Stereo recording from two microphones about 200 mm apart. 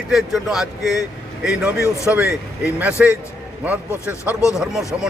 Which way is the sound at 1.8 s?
15° left (ahead or behind).